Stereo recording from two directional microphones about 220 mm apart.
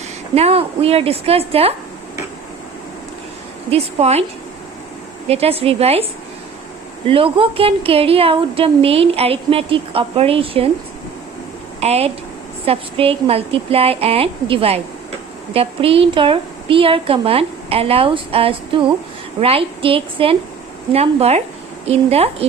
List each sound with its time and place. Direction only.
0.3 s speech: 30° right (ahead or behind)
3.7 s speech: 25° right (ahead or behind)
5.3 s speech: 25° right (ahead or behind)
11.8 s speech: 30° right (ahead or behind)